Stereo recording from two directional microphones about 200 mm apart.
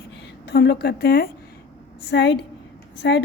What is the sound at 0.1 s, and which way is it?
A woman's voice, 60° left (ahead or behind).